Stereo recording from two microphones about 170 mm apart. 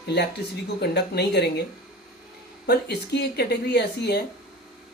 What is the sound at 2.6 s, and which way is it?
Speech, 75° left (ahead or behind).